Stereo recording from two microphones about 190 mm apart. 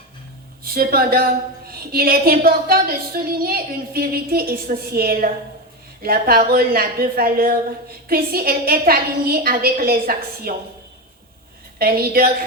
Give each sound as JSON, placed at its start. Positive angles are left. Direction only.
{"t": 0.6, "sound": "a woman's voice", "side_deg": -50}
{"t": 11.8, "sound": "a woman's voice", "side_deg": -50}